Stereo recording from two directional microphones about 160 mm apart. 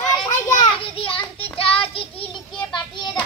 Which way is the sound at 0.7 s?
35° left (ahead or behind).